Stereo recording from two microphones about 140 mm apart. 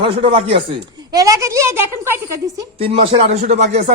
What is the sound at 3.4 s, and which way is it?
Speech, 55° right (ahead or behind).